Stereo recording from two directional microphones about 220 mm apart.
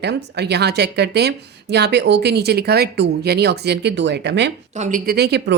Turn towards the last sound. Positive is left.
turn(degrees=-45)  # may be behind; listen again after turning